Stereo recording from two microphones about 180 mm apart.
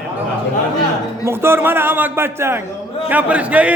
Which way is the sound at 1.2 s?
15° right (ahead or behind).